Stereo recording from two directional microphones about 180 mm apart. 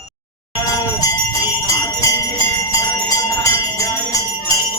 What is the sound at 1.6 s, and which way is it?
Jingle bell, 15° left (ahead or behind).